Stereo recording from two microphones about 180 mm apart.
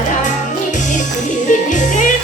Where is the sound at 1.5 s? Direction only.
45° left (ahead or behind).